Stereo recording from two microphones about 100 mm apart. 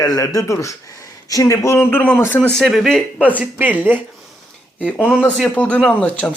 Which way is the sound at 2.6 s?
Centre (ahead or behind).